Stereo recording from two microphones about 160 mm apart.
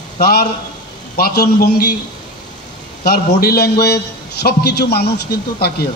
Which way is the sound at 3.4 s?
75° left (ahead or behind).